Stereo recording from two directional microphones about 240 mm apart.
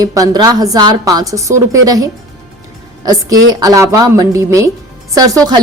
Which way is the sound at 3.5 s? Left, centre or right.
Centre.